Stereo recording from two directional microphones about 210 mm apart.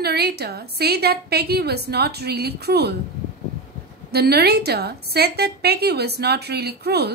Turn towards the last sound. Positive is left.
turn(degrees=-50)  # may be behind; listen again after turning